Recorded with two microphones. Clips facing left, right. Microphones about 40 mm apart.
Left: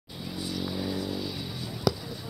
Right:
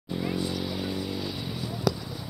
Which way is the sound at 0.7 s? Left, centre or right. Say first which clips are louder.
Even; right.